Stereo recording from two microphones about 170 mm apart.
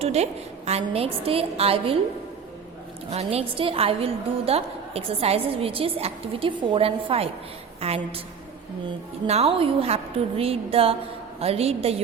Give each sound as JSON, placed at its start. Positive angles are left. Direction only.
{"t": 0.0, "sound": "a woman's voice", "side_deg": -40}
{"t": 3.1, "sound": "a woman's voice", "side_deg": -40}
{"t": 9.2, "sound": "a woman's voice", "side_deg": -35}